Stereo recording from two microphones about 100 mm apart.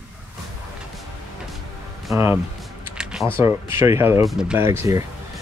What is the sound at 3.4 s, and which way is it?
Speech, 25° right (ahead or behind).